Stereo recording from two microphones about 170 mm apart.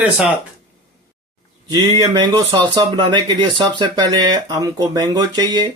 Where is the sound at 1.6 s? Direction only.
25° right (ahead or behind).